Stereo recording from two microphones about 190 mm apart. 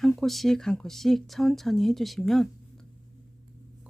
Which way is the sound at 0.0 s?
Centre (ahead or behind).